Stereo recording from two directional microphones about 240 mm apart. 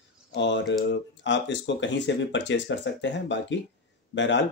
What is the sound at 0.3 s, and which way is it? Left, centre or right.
Speech, left.